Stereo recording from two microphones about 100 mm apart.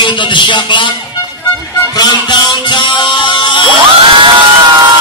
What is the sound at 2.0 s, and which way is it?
Speech, 45° left (ahead or behind).